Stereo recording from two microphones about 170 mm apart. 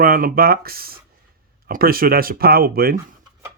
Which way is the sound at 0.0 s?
55° right (ahead or behind).